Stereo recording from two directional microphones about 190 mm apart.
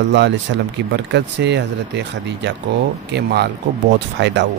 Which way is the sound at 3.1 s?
60° right (ahead or behind).